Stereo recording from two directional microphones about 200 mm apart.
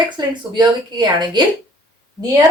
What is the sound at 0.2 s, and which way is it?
Speech, 20° right (ahead or behind).